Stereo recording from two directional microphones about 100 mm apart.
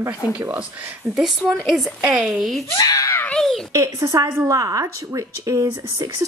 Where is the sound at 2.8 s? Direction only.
30° left (ahead or behind).